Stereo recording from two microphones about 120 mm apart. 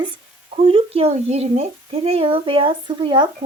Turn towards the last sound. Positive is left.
turn(degrees=-40)  # may be behind; listen again after turning